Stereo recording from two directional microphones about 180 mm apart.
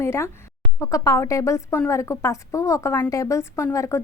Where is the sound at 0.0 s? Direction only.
15° left (ahead or behind).